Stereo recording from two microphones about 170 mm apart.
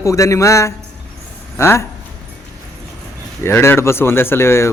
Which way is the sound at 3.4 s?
15° left (ahead or behind).